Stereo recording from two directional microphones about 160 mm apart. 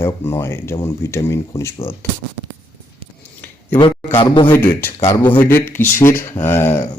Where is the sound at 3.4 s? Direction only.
20° left (ahead or behind).